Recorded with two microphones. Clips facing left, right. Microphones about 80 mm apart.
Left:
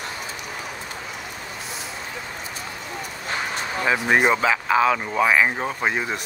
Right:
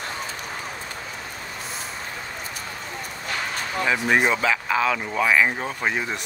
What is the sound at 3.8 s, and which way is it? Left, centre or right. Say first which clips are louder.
Speech: left 1 dB; centre.